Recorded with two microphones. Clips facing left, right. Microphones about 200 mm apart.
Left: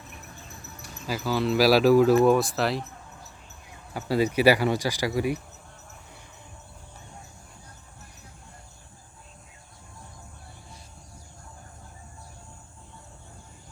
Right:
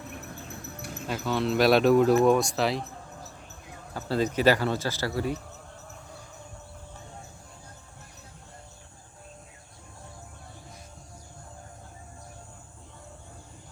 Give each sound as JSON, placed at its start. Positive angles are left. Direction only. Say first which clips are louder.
{"t": 0.1, "sound": "a sound", "louder": "right 6 dB", "side_deg": -60}
{"t": 1.0, "sound": "speech", "louder": "left 2 dB", "side_deg": 5}
{"t": 3.9, "sound": "speech", "louder": "left 3 dB", "side_deg": 10}